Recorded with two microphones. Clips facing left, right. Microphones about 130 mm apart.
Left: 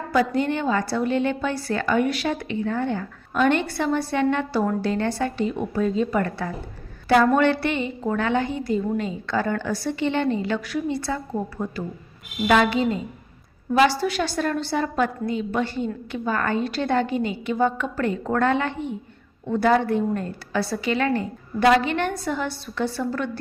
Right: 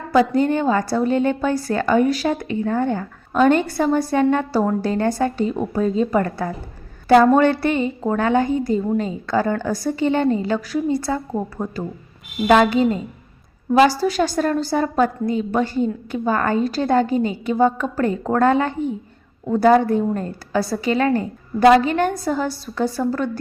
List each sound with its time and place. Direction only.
0.3 s a woman's voice: 40° right (ahead or behind)